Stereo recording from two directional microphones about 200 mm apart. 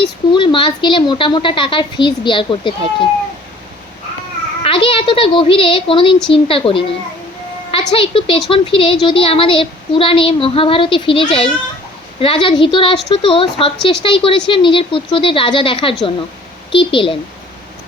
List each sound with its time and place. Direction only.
0.3 s speech: 25° left (ahead or behind)
4.6 s a woman's voice: 25° left (ahead or behind)